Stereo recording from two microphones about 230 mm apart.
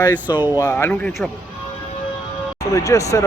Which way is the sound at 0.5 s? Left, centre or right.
Centre.